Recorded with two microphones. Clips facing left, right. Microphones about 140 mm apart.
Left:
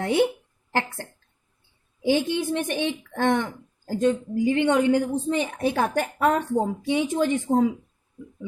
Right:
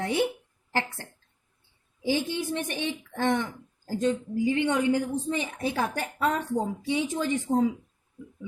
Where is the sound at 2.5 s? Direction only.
60° left (ahead or behind).